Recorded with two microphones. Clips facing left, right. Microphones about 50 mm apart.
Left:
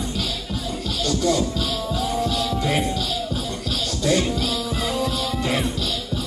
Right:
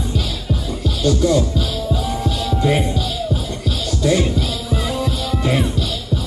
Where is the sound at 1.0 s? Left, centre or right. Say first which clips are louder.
Right 5 dB; centre.